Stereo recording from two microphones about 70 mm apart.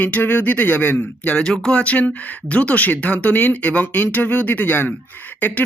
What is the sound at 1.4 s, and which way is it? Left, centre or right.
Speech, centre.